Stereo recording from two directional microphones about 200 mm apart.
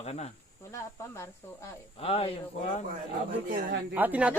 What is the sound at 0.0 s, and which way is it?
Speech, 30° left (ahead or behind).